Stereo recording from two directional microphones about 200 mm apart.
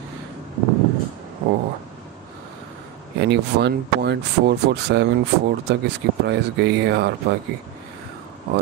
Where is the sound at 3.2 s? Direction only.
55° right (ahead or behind).